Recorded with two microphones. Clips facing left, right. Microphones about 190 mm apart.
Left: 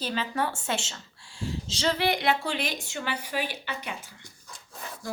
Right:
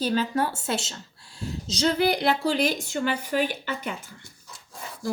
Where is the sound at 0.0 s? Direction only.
45° right (ahead or behind).